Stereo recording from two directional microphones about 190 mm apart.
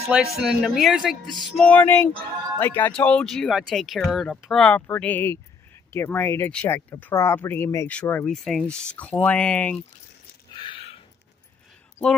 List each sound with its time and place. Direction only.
0.1 s speech: 5° right (ahead or behind)
1.6 s speech: 10° left (ahead or behind)
10.5 s a sound: 25° left (ahead or behind)